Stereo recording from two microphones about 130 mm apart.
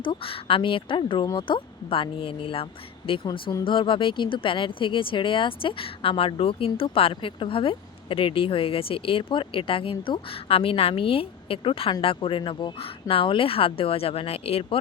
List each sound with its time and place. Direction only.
0.0 s a woman's voice: 40° left (ahead or behind)